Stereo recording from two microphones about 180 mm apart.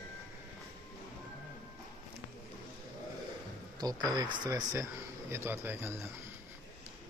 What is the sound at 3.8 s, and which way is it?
Speech, 20° right (ahead or behind).